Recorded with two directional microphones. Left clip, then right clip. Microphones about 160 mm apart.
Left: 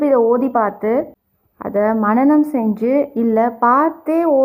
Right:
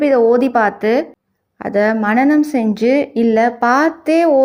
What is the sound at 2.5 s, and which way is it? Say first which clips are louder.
A woman's voice: right 3 dB; 30° right (ahead or behind).